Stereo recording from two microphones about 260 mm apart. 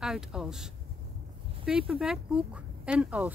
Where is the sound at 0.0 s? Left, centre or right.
Centre.